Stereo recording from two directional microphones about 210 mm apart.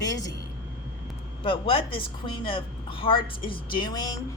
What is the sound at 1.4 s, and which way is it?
A woman's voice, 25° left (ahead or behind).